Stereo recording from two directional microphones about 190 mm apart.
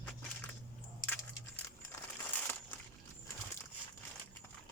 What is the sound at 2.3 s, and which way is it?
Crushing, 10° left (ahead or behind).